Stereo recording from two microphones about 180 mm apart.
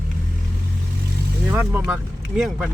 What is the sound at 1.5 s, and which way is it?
Speech, 10° right (ahead or behind).